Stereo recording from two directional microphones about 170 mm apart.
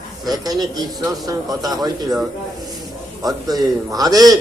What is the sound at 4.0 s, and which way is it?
Speech, 20° right (ahead or behind).